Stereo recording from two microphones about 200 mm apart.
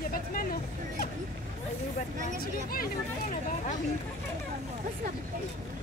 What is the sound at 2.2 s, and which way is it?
Speech, 45° left (ahead or behind).